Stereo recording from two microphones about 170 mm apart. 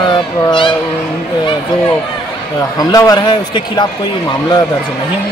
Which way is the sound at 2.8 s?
20° left (ahead or behind).